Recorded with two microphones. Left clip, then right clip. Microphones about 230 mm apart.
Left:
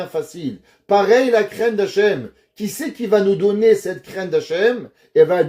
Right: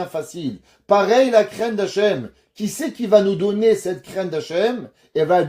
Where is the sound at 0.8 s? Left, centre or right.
Right.